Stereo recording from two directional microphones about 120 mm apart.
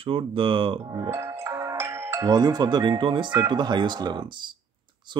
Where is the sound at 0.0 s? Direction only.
45° right (ahead or behind).